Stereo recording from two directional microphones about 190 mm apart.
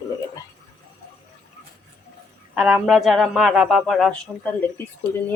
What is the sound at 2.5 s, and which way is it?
A man's voice, 5° right (ahead or behind).